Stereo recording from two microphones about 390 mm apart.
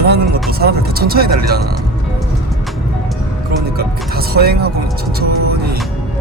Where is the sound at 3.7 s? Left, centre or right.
Right.